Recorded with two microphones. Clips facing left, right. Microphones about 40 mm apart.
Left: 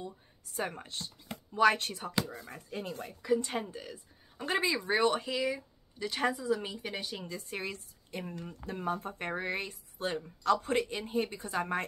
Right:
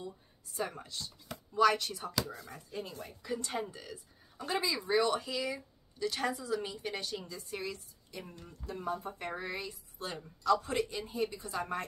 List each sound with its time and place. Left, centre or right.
0.5 s speech: left
2.3 s speech: left
2.7 s speech: left
3.3 s speech: left
3.7 s speech: centre
4.4 s speech: left; by 7.2 s centre
7.2 s speech: left